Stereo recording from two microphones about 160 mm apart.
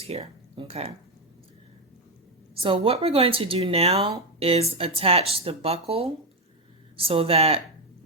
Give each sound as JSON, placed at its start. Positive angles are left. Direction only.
{"t": 0.0, "sound": "speech", "side_deg": -40}
{"t": 2.6, "sound": "speech", "side_deg": -35}